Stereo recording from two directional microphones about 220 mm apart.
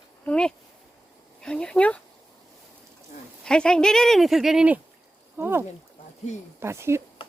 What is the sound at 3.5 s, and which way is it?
Speech, 5° left (ahead or behind).